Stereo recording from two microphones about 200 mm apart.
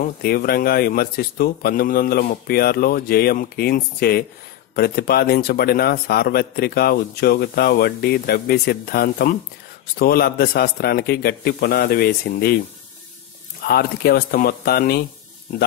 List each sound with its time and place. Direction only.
0.0 s speech: 50° left (ahead or behind)
13.6 s speech: 50° left (ahead or behind)